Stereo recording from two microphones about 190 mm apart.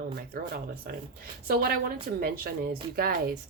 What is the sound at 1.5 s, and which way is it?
Speech, 55° right (ahead or behind).